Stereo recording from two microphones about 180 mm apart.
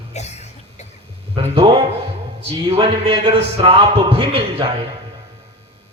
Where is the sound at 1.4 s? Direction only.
30° right (ahead or behind).